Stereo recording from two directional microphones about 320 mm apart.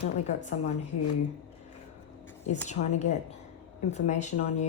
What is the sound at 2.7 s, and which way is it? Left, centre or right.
Speech, left.